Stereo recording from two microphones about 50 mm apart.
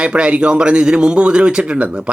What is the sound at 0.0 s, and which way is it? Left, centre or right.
Speech, right.